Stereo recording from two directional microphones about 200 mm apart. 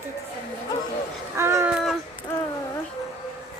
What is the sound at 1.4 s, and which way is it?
Speech, 10° right (ahead or behind).